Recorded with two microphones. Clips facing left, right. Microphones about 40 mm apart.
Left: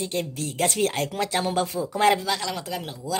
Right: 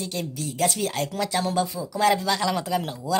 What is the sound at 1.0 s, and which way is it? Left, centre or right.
Speech, left.